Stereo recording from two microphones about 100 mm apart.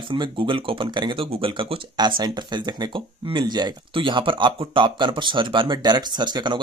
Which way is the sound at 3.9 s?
60° right (ahead or behind).